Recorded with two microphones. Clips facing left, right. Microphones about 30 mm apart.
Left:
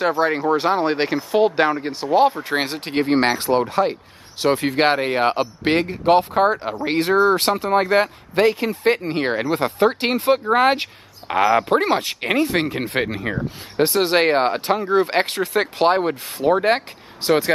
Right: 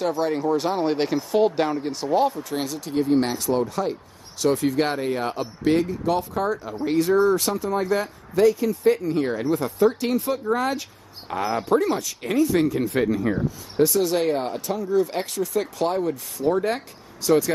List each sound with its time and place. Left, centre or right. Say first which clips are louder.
0.0 s speech: left 4 dB; left
2.2 s speech: left 6 dB; left